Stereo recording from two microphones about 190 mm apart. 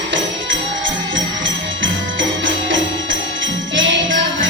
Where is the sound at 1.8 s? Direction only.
85° right.